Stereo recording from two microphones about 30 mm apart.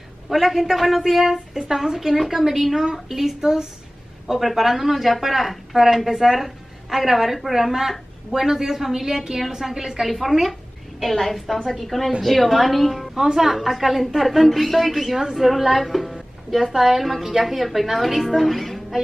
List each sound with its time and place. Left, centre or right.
0.3 s a woman's voice: centre
4.3 s a woman's voice: centre
6.0 s a woman's voice: centre
7.5 s a woman's voice: centre
10.0 s a woman's voice: centre
11.0 s a woman's voice: centre
13.1 s a woman's voice: centre